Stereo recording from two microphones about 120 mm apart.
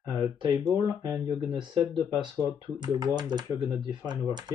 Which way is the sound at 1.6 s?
40° right (ahead or behind).